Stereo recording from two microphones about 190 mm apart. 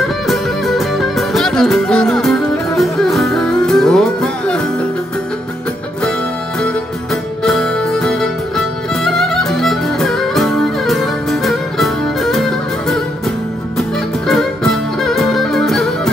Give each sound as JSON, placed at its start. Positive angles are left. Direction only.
{"t": 0.0, "sound": "music", "side_deg": 0}
{"t": 6.6, "sound": "music", "side_deg": 0}